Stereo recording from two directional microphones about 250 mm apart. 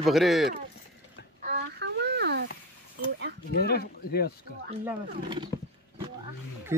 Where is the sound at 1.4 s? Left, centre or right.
Right.